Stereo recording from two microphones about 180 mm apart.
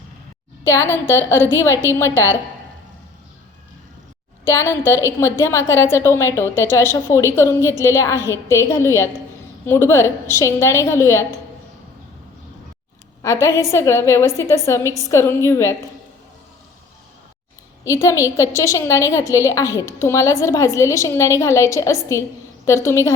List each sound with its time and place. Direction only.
0.6 s a woman's voice: 15° left (ahead or behind)
1.7 s a woman's voice: 15° right (ahead or behind)
2.0 s a woman's voice: 15° left (ahead or behind)
4.4 s a woman's voice: 15° left (ahead or behind)
13.2 s a woman's voice: 15° left (ahead or behind)
17.8 s a woman's voice: 15° left (ahead or behind)